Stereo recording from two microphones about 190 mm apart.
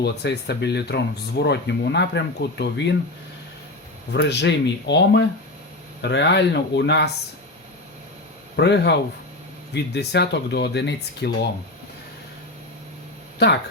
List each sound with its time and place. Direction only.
0.0 s speech: 60° left (ahead or behind)
4.1 s speech: 60° left (ahead or behind)
8.5 s speech: 65° left (ahead or behind)